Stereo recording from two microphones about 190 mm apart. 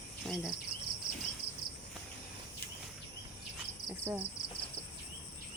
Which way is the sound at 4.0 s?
15° right (ahead or behind).